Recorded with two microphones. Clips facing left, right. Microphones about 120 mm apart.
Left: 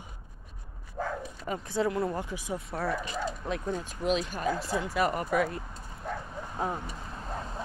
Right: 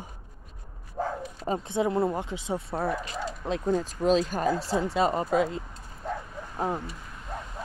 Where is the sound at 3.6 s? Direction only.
35° right (ahead or behind).